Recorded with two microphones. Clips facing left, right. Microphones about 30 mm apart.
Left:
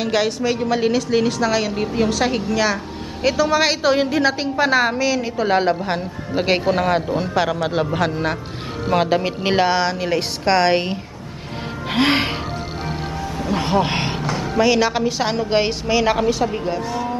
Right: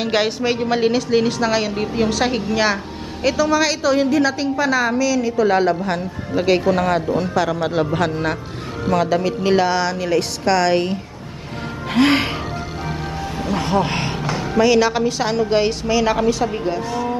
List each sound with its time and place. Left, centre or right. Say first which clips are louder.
0.0 s a woman's voice: right 1 dB; centre
3.2 s a woman's voice: even; centre
9.0 s a woman's voice: even; left
11.9 s a woman's voice: right 2 dB; centre
13.8 s a woman's voice: left 1 dB; left
14.3 s a woman's voice: right 2 dB; centre